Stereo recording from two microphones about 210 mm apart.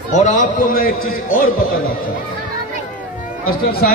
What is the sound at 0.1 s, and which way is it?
A man's voice, 35° left (ahead or behind).